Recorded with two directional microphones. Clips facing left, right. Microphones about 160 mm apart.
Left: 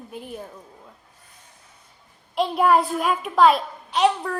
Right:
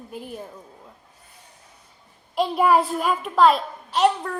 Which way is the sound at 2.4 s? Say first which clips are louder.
Even; centre (ahead or behind).